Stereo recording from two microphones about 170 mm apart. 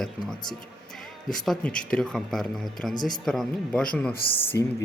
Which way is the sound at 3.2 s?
Centre (ahead or behind).